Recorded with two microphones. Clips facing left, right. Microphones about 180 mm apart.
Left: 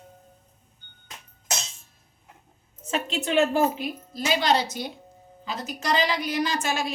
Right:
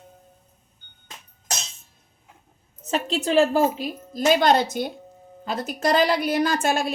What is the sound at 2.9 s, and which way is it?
A woman's voice, 35° right (ahead or behind).